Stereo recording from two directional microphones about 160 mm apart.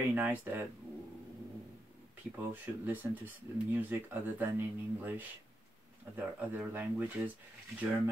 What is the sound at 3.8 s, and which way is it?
Speech, 10° right (ahead or behind).